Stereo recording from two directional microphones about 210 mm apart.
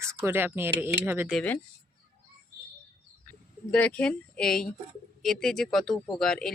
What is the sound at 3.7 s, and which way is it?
Speech, 5° left (ahead or behind).